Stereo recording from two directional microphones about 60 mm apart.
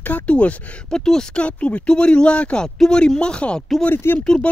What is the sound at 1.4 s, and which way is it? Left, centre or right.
Speech, left.